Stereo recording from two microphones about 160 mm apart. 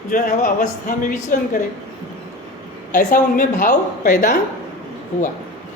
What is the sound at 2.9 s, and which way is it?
A woman's voice, 55° left (ahead or behind).